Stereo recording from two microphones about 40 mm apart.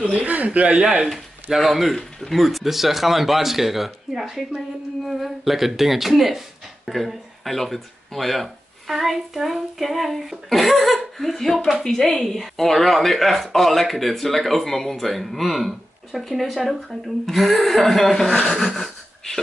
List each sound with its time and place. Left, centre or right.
0.0 s speech: right
1.6 s speech: centre
18.8 s a sound: centre